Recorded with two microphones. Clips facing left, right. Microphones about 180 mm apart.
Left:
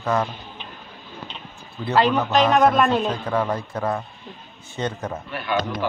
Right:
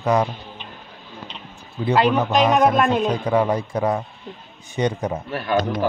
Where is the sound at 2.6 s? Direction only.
Centre (ahead or behind).